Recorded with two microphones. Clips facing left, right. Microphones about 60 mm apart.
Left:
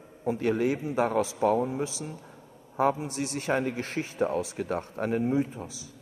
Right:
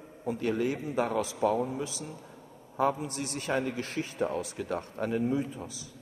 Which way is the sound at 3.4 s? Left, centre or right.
Left.